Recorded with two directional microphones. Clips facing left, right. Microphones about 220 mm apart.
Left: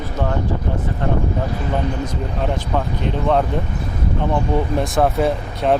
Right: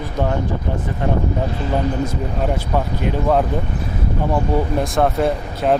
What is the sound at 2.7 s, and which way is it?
Speech, 5° right (ahead or behind).